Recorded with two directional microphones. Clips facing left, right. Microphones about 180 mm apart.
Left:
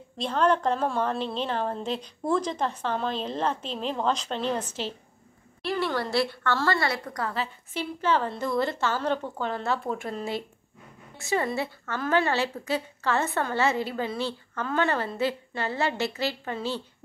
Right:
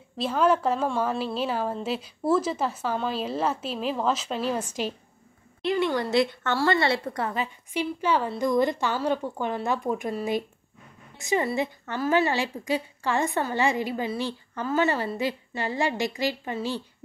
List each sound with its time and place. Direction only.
0.2 s a woman's voice: 5° right (ahead or behind)